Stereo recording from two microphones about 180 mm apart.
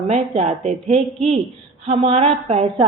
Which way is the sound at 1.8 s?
35° right (ahead or behind).